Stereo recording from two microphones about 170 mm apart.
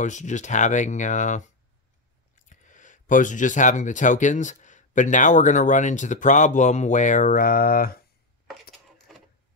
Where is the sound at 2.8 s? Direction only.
50° left (ahead or behind).